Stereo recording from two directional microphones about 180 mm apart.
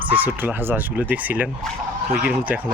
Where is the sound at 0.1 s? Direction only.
10° right (ahead or behind).